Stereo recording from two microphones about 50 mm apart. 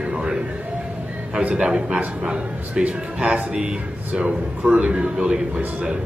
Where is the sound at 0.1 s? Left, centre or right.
Centre.